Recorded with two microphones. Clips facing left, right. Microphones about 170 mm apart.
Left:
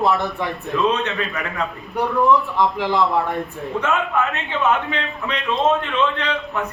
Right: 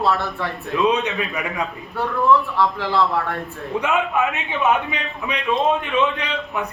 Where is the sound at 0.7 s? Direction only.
15° right (ahead or behind).